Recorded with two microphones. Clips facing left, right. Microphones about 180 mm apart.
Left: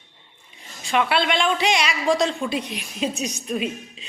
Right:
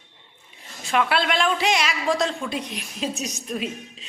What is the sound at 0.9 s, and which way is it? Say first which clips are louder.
A woman's voice: left 1 dB; centre (ahead or behind).